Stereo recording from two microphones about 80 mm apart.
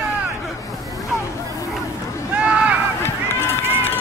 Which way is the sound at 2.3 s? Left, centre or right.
Centre.